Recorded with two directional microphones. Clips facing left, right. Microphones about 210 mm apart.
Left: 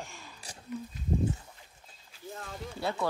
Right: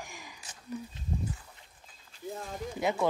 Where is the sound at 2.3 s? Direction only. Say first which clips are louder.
Right 3 dB; 20° right (ahead or behind).